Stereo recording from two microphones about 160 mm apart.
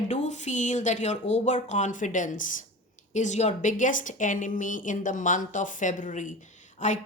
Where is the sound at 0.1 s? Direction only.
50° left (ahead or behind).